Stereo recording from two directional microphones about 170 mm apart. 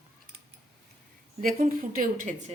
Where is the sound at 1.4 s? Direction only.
55° right (ahead or behind).